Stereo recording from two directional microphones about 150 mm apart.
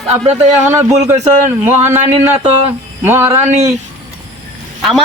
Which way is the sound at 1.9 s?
15° right (ahead or behind).